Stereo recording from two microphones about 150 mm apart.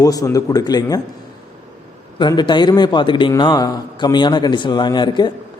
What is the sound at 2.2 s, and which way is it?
A man's voice, 30° left (ahead or behind).